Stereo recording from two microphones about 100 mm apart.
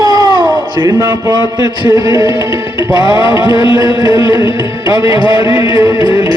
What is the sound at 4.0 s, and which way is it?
Speech, 40° right (ahead or behind).